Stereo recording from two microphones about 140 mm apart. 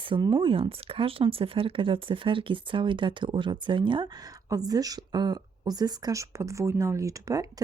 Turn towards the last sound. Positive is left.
turn(degrees=-25)  # may be behind; listen again after turning